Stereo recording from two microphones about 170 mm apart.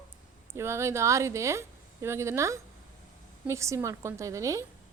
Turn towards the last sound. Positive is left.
turn(degrees=-20)  # may be behind; listen again after turning